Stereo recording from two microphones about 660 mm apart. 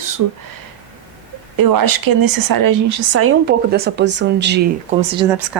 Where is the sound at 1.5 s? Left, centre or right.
Right.